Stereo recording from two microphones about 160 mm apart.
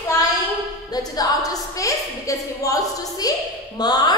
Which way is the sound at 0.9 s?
25° left (ahead or behind).